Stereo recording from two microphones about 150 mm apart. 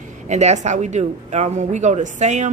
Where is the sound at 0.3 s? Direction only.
50° right (ahead or behind).